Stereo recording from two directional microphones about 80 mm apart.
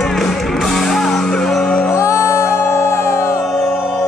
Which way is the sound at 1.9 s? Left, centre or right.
Left.